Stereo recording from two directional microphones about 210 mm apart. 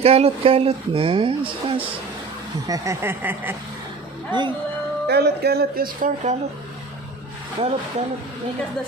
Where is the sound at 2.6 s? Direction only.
15° right (ahead or behind).